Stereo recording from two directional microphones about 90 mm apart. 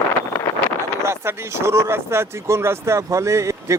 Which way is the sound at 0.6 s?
15° left (ahead or behind).